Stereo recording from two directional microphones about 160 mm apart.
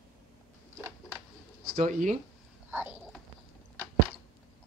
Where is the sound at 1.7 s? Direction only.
55° right (ahead or behind).